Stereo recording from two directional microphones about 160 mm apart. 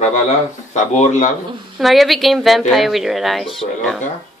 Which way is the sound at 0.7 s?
50° left (ahead or behind).